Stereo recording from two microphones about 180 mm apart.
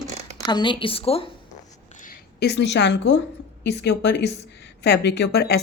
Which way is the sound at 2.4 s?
70° left (ahead or behind).